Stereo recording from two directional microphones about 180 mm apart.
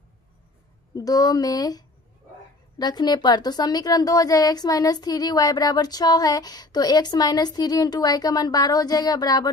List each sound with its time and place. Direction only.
0.9 s a woman's voice: 20° left (ahead or behind)